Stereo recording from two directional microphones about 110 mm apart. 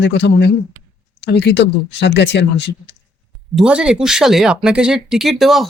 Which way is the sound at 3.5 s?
10° right (ahead or behind).